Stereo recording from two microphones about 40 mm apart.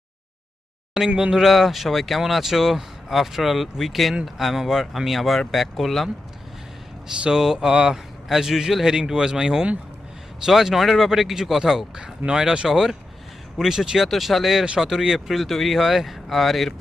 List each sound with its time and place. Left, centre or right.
0.9 s a man's voice: centre
1.4 s speech: centre
7.3 s a man's voice: centre